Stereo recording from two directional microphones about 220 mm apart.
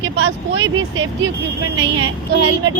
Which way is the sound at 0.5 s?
60° right (ahead or behind).